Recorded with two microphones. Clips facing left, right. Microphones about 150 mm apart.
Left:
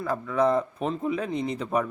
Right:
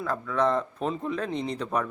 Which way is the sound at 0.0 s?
5° left (ahead or behind).